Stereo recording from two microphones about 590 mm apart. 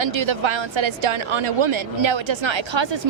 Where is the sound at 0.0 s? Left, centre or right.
Right.